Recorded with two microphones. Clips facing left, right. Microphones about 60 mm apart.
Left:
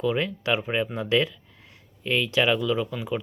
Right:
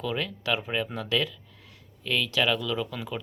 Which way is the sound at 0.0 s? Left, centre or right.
Centre.